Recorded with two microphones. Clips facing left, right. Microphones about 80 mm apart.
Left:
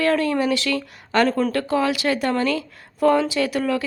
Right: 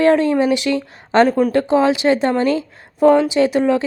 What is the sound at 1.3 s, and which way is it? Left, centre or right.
A woman's voice, centre.